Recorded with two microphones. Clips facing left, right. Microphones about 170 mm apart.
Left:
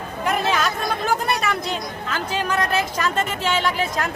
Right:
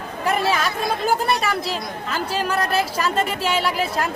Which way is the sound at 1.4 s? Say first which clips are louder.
Right 1 dB; centre (ahead or behind).